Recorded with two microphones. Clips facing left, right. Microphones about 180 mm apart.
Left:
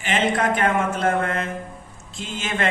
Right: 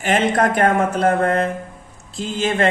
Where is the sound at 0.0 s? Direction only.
45° right (ahead or behind).